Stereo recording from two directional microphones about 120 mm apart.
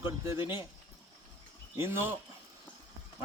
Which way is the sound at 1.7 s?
20° right (ahead or behind).